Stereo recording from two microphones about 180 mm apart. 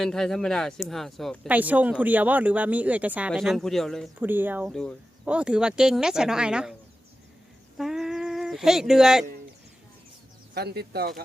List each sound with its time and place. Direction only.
0.0 s speech: 5° left (ahead or behind)
1.5 s speech: 10° right (ahead or behind)
4.2 s speech: 10° right (ahead or behind)
4.7 s speech: 5° left (ahead or behind)
5.2 s speech: 5° right (ahead or behind)
7.8 s a sound: centre (ahead or behind)
10.5 s speech: 60° right (ahead or behind)